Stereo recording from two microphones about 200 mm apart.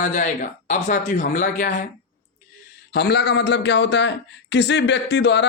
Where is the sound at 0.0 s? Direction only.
40° left (ahead or behind).